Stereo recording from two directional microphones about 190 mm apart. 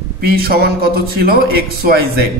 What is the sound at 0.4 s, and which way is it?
A man's voice, 55° right (ahead or behind).